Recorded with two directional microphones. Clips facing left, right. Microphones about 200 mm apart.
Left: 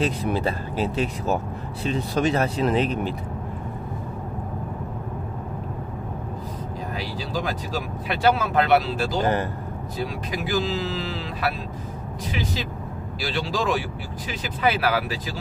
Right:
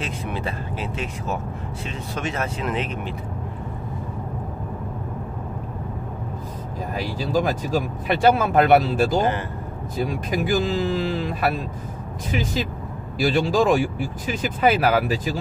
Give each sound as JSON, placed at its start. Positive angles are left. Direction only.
{"t": 0.0, "sound": "speech", "side_deg": 35}
{"t": 7.0, "sound": "speech", "side_deg": -50}